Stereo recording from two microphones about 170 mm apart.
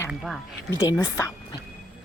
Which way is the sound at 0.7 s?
20° left (ahead or behind).